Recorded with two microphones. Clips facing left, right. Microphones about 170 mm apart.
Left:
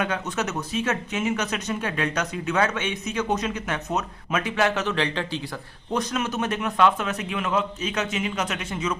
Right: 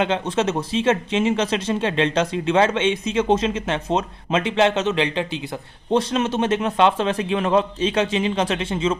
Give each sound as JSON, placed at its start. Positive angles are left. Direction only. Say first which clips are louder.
{"t": 0.0, "sound": "a man's voice", "louder": "right 6 dB", "side_deg": -25}
{"t": 5.9, "sound": "a man's voice", "louder": "right 6 dB", "side_deg": -30}